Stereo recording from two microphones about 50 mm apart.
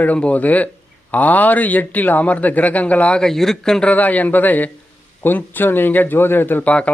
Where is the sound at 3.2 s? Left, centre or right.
Centre.